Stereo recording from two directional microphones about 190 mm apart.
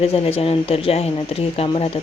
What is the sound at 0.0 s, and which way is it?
Speech, 30° left (ahead or behind).